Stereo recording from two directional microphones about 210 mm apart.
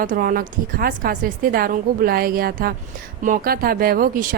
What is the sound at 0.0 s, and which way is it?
Speech, 40° right (ahead or behind).